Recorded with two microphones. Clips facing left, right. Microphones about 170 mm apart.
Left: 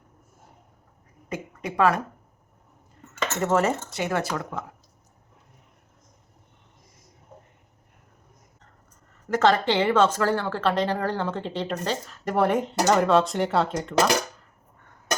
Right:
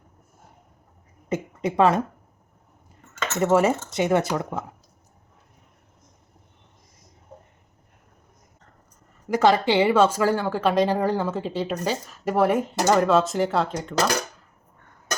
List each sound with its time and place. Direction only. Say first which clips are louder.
1.3 s a woman's voice: right 6 dB; 25° right (ahead or behind)
3.4 s speech: right 4 dB; 10° right (ahead or behind)
9.3 s speech: right 2 dB; 10° right (ahead or behind)